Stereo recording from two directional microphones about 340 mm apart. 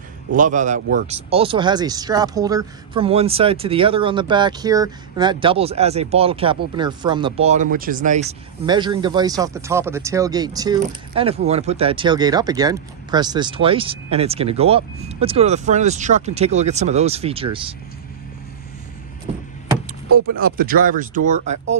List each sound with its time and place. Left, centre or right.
0.4 s speech: right
20.3 s speech: right